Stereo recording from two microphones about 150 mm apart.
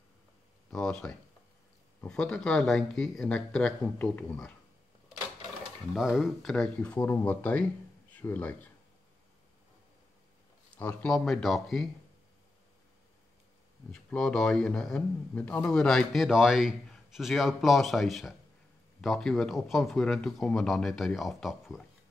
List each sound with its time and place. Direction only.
0.7 s a man's voice: 5° left (ahead or behind)
5.9 s speech: centre (ahead or behind)
10.8 s a man's voice: 10° left (ahead or behind)
13.9 s a man's voice: 5° left (ahead or behind)